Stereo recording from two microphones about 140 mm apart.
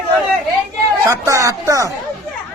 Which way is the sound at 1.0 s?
20° right (ahead or behind).